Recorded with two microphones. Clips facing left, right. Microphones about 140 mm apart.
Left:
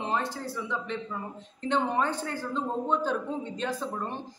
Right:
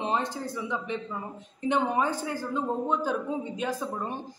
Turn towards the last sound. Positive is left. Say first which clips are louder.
# right 1 dB
turn(degrees=-10)  # may be behind; listen again after turning